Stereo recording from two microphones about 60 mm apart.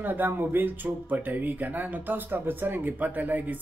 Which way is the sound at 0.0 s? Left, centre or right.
Right.